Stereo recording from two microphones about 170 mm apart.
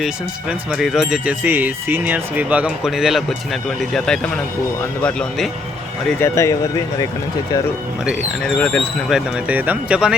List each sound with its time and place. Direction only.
0.0 s speech: centre (ahead or behind)
6.1 s speech: 15° left (ahead or behind)
8.0 s speech: 5° left (ahead or behind)